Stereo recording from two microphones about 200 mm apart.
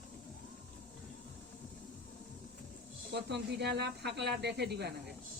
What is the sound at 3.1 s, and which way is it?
Speech, 55° right (ahead or behind).